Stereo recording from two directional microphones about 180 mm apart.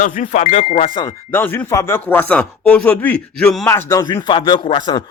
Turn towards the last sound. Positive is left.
turn(degrees=25)  # may be behind; listen again after turning